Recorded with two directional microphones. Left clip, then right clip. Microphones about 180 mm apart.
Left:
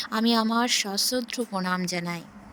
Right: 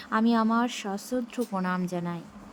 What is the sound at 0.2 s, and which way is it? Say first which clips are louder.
A woman's voice: left 2 dB; 55° left (ahead or behind).